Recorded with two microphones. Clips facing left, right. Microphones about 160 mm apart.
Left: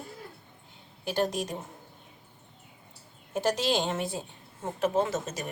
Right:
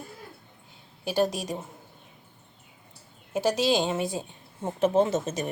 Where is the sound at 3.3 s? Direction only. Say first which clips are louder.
Right 3 dB; 10° right (ahead or behind).